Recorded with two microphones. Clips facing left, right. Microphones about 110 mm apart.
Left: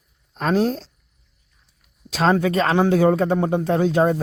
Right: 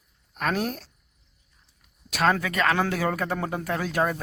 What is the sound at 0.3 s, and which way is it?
Speech, 30° left (ahead or behind).